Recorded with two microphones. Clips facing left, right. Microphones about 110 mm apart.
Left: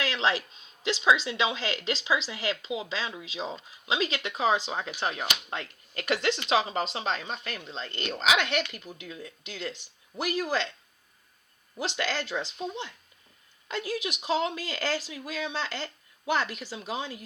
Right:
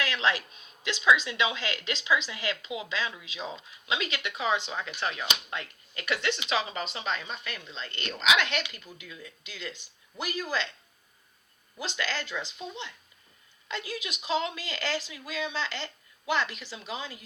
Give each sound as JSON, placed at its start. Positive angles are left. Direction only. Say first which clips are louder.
{"t": 0.0, "sound": "speech", "louder": "left 1 dB", "side_deg": 30}
{"t": 11.9, "sound": "speech", "louder": "left 2 dB", "side_deg": 40}